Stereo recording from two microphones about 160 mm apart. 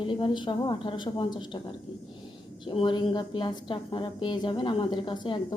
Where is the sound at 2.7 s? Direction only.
30° left (ahead or behind).